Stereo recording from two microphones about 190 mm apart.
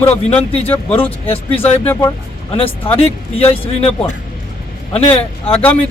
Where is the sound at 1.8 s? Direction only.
10° left (ahead or behind).